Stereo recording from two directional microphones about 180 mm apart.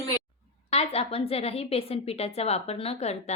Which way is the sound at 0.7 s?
35° left (ahead or behind).